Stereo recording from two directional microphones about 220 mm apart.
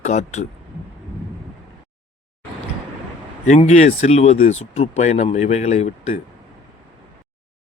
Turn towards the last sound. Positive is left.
turn(degrees=30)  # may be behind; listen again after turning